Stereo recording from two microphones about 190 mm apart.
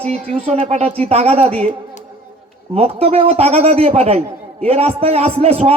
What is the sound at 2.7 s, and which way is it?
A man's voice, 30° right (ahead or behind).